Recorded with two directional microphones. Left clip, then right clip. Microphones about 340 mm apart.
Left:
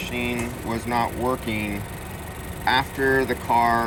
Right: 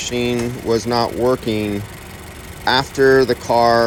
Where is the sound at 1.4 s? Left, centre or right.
Centre.